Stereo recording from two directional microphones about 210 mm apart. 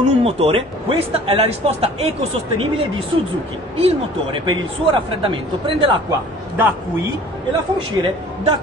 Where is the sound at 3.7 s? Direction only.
25° right (ahead or behind).